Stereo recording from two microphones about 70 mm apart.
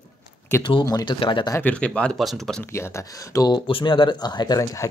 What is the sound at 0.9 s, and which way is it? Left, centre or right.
Speech, left.